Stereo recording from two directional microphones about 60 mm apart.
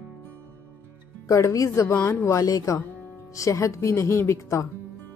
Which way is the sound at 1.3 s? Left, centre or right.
Left.